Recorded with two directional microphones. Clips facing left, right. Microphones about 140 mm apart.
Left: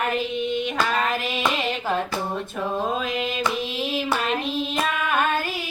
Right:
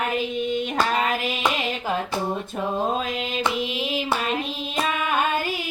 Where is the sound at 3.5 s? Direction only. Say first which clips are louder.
Right 1 dB; 15° right (ahead or behind).